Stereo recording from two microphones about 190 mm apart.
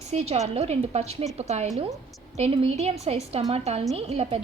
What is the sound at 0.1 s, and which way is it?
A woman's voice, 35° right (ahead or behind).